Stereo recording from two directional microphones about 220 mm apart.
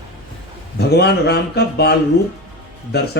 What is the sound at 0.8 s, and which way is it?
Speech, 50° left (ahead or behind).